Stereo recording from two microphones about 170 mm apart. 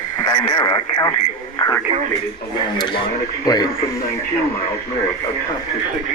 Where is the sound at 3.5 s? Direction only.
20° left (ahead or behind).